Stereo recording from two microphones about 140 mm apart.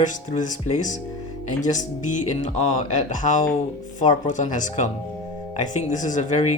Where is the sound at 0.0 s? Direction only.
60° left (ahead or behind).